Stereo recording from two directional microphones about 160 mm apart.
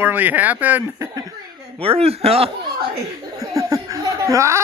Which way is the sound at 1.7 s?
35° right (ahead or behind).